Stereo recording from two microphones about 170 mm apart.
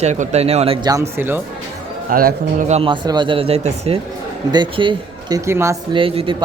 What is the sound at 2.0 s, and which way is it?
Speech, 55° right (ahead or behind).